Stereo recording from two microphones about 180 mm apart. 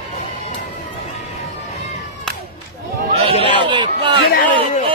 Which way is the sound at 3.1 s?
30° right (ahead or behind).